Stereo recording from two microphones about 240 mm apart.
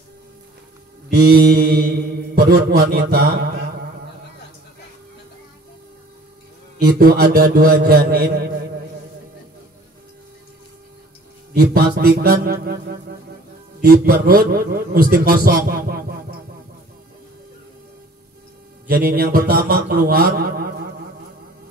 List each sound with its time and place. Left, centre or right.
1.1 s a man's voice: right
6.8 s a man's voice: right
11.5 s a man's voice: right
18.9 s a man's voice: right